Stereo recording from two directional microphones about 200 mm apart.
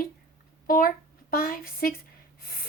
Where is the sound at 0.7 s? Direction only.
45° left (ahead or behind).